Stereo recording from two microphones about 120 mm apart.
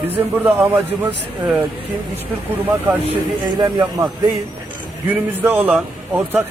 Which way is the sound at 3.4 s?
35° right (ahead or behind).